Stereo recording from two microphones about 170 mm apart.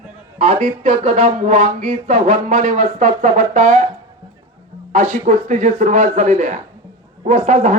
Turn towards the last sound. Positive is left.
turn(degrees=-45)  # may be behind; listen again after turning